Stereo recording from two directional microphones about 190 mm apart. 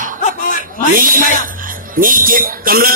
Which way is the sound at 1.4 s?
45° right (ahead or behind).